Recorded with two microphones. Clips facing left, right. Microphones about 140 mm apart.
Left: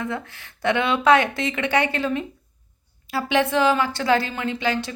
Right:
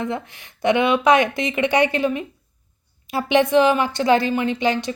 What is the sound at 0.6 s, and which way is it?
Speech, 15° right (ahead or behind).